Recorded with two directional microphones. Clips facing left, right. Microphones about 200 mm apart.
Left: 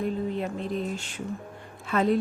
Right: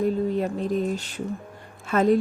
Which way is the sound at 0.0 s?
40° right (ahead or behind).